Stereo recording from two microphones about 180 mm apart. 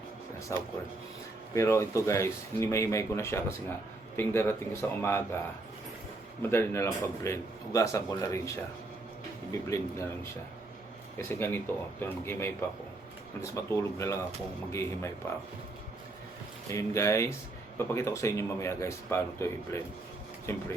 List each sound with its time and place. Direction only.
0.5 s speech: 15° left (ahead or behind)
6.4 s speech: 15° left (ahead or behind)
11.2 s speech: 15° left (ahead or behind)
16.6 s speech: 15° left (ahead or behind)